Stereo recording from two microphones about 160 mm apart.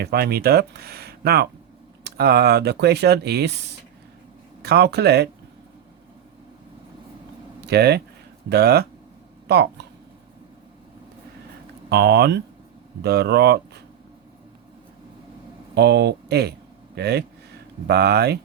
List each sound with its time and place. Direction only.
0.0 s speech: 80° right
7.6 s speech: 90° right
11.9 s speech: 90° right
15.7 s speech: 90° right